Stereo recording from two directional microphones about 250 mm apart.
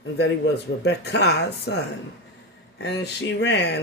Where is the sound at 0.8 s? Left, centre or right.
Left.